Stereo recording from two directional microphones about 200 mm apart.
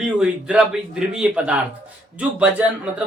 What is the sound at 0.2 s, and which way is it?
Speech, 5° right (ahead or behind).